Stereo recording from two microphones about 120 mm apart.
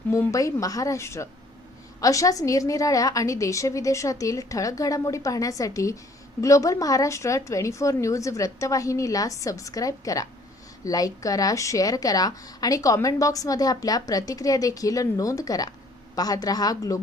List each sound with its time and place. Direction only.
0.1 s a woman's voice: 25° left (ahead or behind)